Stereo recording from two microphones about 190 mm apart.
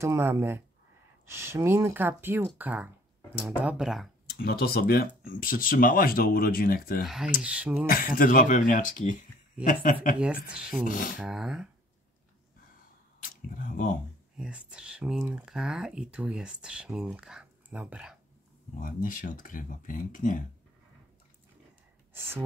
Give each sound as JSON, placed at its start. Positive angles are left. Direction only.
{"t": 0.0, "sound": "speech", "side_deg": -15}
{"t": 4.3, "sound": "speech", "side_deg": 55}
{"t": 7.4, "sound": "speech", "side_deg": -5}
{"t": 7.8, "sound": "speech", "side_deg": 50}
{"t": 10.1, "sound": "speech", "side_deg": -5}
{"t": 10.9, "sound": "speech", "side_deg": 45}
{"t": 11.1, "sound": "speech", "side_deg": 0}
{"t": 13.2, "sound": "speech", "side_deg": 45}
{"t": 14.3, "sound": "speech", "side_deg": -5}
{"t": 18.8, "sound": "speech", "side_deg": 45}
{"t": 22.1, "sound": "speech", "side_deg": -10}